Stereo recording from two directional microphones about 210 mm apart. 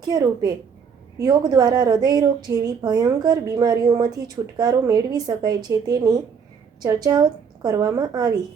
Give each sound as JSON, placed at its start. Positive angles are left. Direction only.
{"t": 0.0, "sound": "a woman's voice", "side_deg": -20}